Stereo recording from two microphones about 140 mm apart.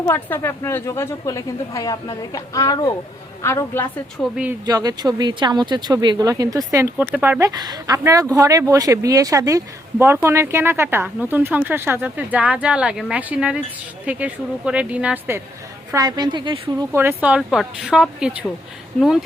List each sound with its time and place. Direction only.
0.1 s a woman's voice: 15° left (ahead or behind)
4.2 s speech: 10° right (ahead or behind)
4.6 s speech: 25° right (ahead or behind)
6.9 s speech: 5° right (ahead or behind)
7.5 s speech: 30° right (ahead or behind); by 15.4 s 10° right (ahead or behind)
15.9 s a woman's voice: 25° right (ahead or behind)
16.9 s speech: 15° right (ahead or behind); by 19.2 s centre (ahead or behind)